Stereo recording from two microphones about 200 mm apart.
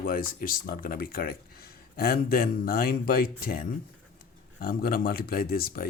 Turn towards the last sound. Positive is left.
turn(degrees=50)  # may be behind; listen again after turning